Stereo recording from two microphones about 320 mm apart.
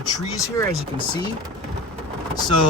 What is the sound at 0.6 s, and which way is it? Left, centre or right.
Speech, centre.